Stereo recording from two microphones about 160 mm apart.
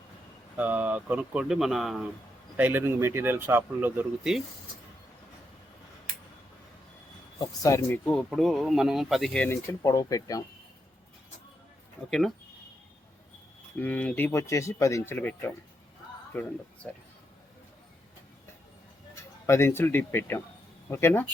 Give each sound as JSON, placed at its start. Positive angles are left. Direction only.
{"t": 0.5, "sound": "speech", "side_deg": -10}
{"t": 2.6, "sound": "speech", "side_deg": -10}
{"t": 7.3, "sound": "speech", "side_deg": 20}
{"t": 12.0, "sound": "speech", "side_deg": 5}
{"t": 13.7, "sound": "speech", "side_deg": 10}
{"t": 14.3, "sound": "speech", "side_deg": 20}
{"t": 19.5, "sound": "speech", "side_deg": 15}